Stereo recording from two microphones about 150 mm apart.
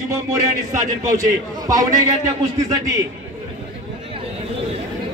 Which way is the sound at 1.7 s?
25° right (ahead or behind).